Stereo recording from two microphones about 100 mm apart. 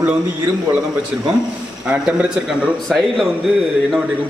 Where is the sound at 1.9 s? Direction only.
10° right (ahead or behind).